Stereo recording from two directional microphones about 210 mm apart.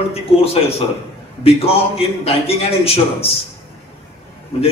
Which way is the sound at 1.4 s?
30° left (ahead or behind).